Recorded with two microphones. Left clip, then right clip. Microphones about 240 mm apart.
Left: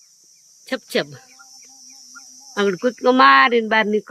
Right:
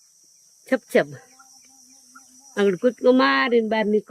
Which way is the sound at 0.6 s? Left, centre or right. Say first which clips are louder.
Right 3 dB; centre.